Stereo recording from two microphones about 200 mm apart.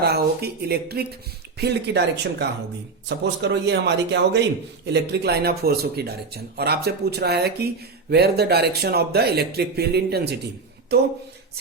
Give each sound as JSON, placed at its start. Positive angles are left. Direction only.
{"t": 0.0, "sound": "speech", "side_deg": -55}
{"t": 3.2, "sound": "speech", "side_deg": -55}